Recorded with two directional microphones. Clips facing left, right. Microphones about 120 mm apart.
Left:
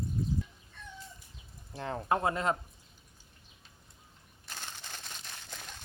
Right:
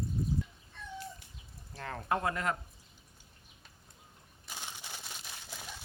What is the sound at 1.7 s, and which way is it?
Speech, 25° left (ahead or behind).